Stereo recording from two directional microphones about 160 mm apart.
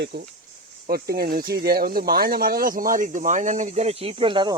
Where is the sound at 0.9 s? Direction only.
70° right (ahead or behind); by 4.6 s 30° right (ahead or behind).